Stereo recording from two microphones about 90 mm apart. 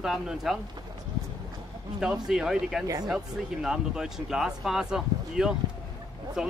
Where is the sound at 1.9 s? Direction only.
5° right (ahead or behind).